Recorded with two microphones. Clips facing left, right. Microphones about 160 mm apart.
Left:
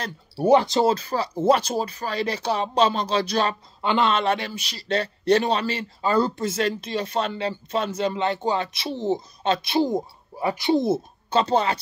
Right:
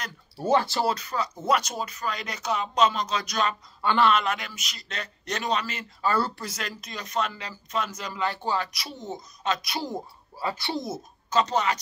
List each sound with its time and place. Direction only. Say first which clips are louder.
0.4 s speech: left 6 dB; 15° left (ahead or behind)
3.8 s speech: left 1 dB; 20° left (ahead or behind)
6.0 s speech: left 5 dB; 20° left (ahead or behind)
10.8 s speech: left 11 dB; 30° left (ahead or behind)